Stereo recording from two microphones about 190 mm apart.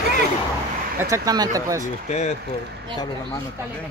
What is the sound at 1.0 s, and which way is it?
Speech, 20° right (ahead or behind).